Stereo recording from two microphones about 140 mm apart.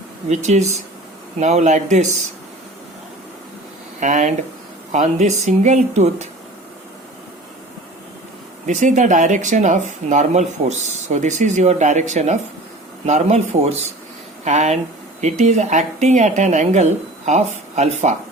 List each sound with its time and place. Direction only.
0.3 s speech: 55° right (ahead or behind)
4.0 s speech: 60° right (ahead or behind)
8.6 s speech: 60° right (ahead or behind)